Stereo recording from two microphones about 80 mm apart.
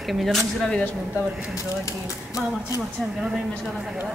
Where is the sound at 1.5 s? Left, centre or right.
Left.